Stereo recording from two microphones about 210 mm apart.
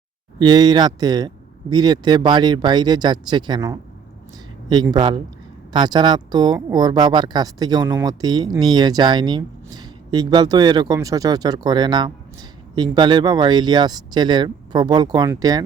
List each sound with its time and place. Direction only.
0.3 s speech: 20° right (ahead or behind)